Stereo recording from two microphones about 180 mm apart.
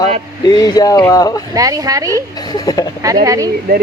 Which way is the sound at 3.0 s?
20° right (ahead or behind).